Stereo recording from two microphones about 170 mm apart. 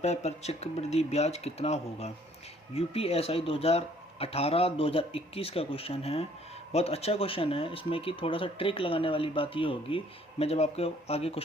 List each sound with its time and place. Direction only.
0.0 s speech: 40° left (ahead or behind)